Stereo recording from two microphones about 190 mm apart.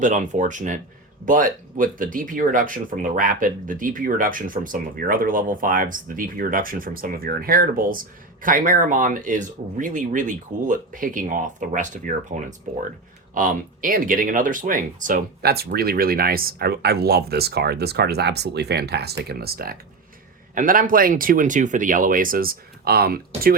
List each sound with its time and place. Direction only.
0.0 s speech: 40° right (ahead or behind)